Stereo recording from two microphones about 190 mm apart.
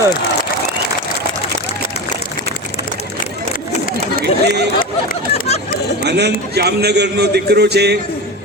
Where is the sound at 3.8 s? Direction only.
50° left (ahead or behind).